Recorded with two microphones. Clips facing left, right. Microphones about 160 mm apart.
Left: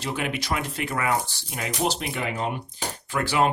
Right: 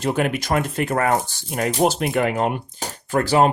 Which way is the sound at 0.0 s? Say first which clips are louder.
Right 7 dB; 45° right (ahead or behind).